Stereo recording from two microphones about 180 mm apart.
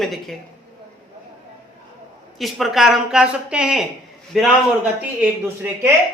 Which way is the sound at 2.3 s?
Centre (ahead or behind).